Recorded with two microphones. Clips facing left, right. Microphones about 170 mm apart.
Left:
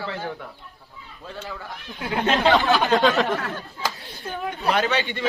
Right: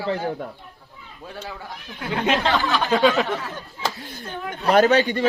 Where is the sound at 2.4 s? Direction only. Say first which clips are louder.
Left 3 dB; 20° left (ahead or behind).